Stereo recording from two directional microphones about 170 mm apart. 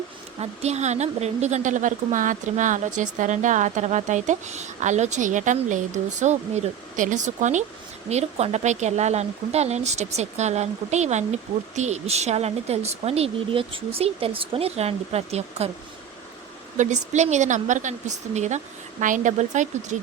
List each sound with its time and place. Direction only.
0.3 s a woman's voice: 40° right (ahead or behind)
16.7 s a woman's voice: 45° right (ahead or behind)